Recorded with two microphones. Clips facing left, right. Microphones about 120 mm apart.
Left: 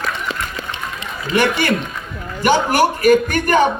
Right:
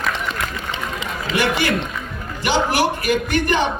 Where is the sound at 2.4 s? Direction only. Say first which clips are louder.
Left 4 dB; 50° left (ahead or behind).